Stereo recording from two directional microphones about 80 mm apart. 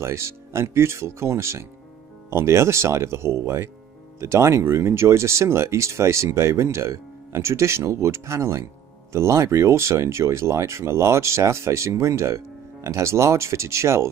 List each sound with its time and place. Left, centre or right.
0.0 s speech: right